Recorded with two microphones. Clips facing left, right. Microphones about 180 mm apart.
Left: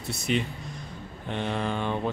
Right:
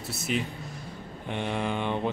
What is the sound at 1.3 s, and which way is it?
Speech, 15° right (ahead or behind).